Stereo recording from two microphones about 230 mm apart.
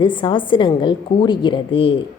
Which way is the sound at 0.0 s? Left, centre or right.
Left.